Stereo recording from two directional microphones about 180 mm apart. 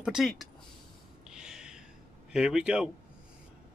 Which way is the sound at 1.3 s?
5° right (ahead or behind).